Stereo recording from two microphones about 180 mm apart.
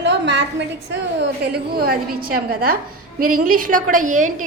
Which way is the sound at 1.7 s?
55° right (ahead or behind).